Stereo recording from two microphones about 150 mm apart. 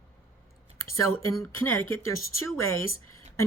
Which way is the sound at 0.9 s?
20° left (ahead or behind).